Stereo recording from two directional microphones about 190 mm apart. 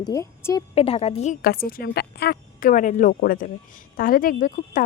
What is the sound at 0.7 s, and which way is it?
A woman's voice, 30° left (ahead or behind).